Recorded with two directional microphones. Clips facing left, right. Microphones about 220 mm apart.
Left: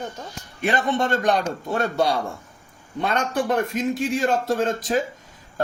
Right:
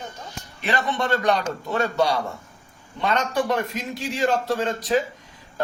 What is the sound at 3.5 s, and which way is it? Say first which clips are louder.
A man's voice: left 5 dB; 50° left (ahead or behind).